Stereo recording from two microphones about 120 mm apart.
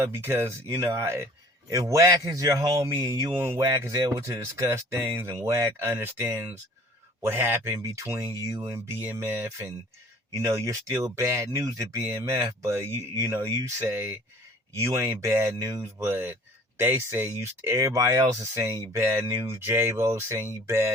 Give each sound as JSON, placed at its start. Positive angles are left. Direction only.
{"t": 0.0, "sound": "speech", "side_deg": -20}